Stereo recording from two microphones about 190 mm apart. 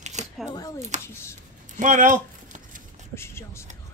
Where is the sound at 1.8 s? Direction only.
45° right (ahead or behind).